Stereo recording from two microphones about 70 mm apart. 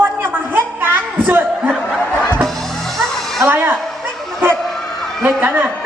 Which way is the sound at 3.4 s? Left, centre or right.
Right.